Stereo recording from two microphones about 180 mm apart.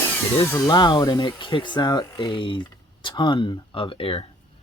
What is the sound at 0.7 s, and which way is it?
Speech, 20° left (ahead or behind).